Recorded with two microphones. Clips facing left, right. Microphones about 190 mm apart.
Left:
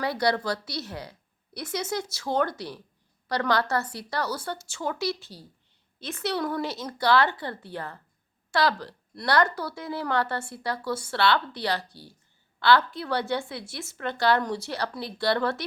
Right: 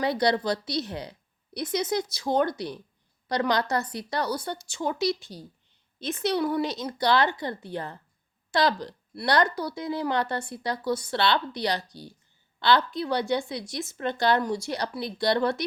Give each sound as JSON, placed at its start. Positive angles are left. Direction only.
{"t": 0.0, "sound": "a woman's voice", "side_deg": -20}